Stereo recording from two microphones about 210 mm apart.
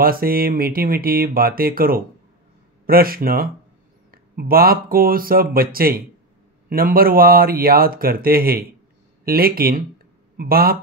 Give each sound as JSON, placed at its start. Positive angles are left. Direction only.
{"t": 0.0, "sound": "speech", "side_deg": -45}